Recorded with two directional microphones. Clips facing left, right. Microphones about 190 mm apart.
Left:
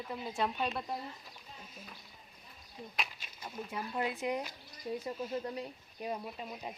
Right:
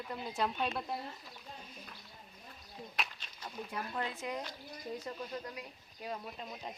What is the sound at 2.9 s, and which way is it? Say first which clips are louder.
Speech: even; 5° left (ahead or behind).